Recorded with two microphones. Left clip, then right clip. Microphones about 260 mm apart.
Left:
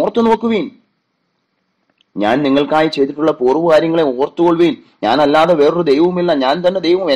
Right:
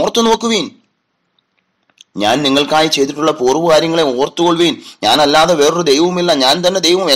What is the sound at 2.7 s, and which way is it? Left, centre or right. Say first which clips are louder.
Speech: right 1 dB; right.